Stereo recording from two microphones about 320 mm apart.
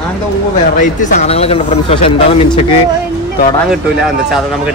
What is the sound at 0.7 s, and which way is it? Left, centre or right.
Speech, left.